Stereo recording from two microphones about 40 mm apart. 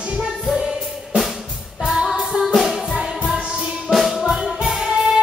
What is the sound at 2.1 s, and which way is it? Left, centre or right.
Music, centre.